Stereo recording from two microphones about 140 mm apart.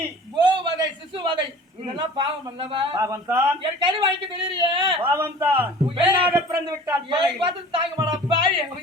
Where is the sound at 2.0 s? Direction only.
35° right (ahead or behind).